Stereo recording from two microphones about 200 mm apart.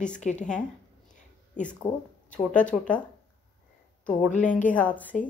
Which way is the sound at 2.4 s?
Centre (ahead or behind).